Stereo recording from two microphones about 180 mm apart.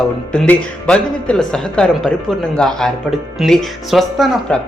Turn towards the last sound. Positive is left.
turn(degrees=0)  # may be behind; listen again after turning